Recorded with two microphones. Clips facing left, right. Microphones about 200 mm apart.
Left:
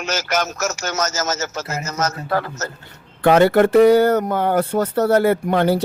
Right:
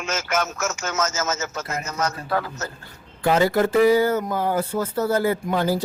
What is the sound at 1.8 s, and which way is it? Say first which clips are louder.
Speech: left 3 dB; 40° left (ahead or behind).